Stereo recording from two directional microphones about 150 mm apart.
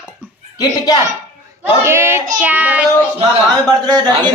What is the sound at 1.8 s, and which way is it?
Child singing, 15° right (ahead or behind).